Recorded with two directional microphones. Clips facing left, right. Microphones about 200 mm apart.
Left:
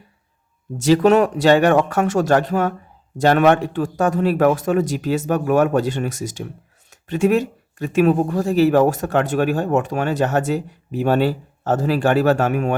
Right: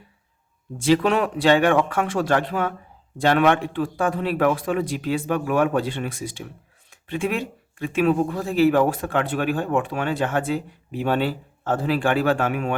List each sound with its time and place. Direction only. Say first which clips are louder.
0.8 s speech: left 5 dB; 45° left (ahead or behind)